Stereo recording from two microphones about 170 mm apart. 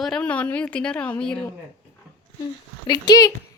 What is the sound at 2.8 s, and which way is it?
Speech, 25° left (ahead or behind).